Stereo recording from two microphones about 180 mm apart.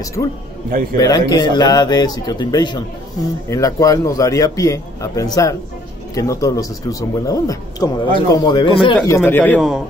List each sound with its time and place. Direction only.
0.2 s speech: 20° left (ahead or behind)